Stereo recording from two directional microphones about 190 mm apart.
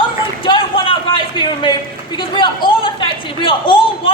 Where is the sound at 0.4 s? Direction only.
25° left (ahead or behind).